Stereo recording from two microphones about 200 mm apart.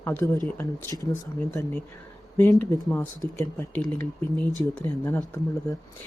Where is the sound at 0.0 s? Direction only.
10° left (ahead or behind).